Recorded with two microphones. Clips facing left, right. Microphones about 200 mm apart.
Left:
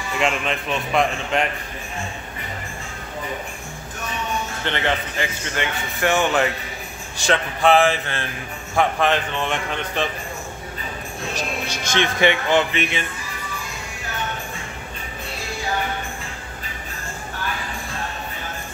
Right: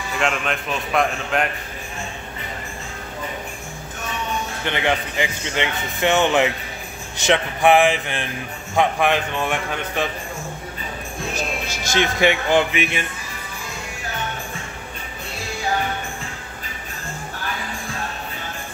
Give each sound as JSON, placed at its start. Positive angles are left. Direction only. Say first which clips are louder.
{"t": 0.2, "sound": "a man's voice", "louder": "left 1 dB", "side_deg": 0}
{"t": 4.6, "sound": "speech", "louder": "right 2 dB", "side_deg": -15}
{"t": 11.3, "sound": "speech", "louder": "left 1 dB", "side_deg": -10}